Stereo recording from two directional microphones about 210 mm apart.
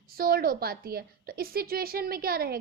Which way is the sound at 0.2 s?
45° right (ahead or behind).